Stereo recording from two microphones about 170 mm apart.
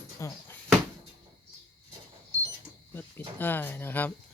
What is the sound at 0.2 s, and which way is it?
Speech, 15° left (ahead or behind).